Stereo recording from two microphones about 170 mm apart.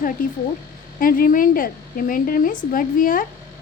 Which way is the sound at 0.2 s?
55° left (ahead or behind).